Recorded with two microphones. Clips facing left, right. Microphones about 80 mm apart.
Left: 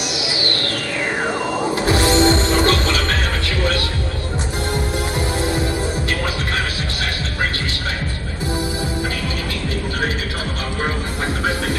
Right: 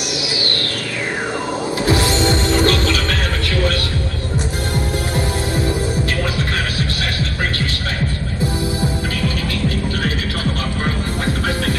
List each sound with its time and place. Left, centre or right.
1.9 s music: left